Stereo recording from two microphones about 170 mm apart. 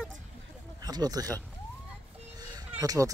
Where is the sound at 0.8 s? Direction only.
25° right (ahead or behind).